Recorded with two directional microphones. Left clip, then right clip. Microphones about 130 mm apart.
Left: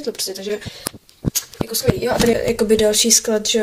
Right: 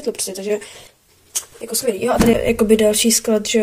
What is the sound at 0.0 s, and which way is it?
Speech, 15° right (ahead or behind).